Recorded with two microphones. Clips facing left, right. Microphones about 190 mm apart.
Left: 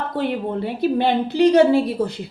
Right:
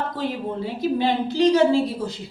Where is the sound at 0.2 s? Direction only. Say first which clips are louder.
Left 7 dB; 60° left (ahead or behind).